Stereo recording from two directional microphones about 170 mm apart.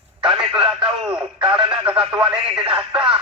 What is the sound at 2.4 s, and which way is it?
Speech, 30° right (ahead or behind).